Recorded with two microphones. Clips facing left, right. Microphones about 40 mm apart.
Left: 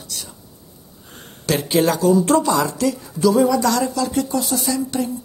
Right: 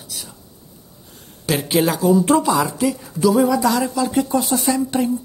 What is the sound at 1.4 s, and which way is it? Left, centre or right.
A man's voice, centre.